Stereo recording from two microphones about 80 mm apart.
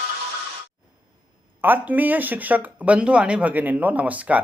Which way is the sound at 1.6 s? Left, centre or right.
Right.